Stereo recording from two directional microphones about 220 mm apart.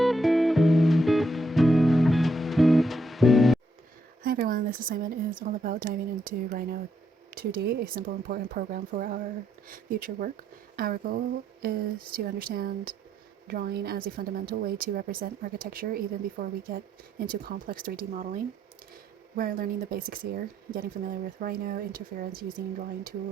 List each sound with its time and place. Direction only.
0.0 s music: centre (ahead or behind)
4.2 s a woman's voice: 40° right (ahead or behind)
19.4 s a woman's voice: 40° right (ahead or behind)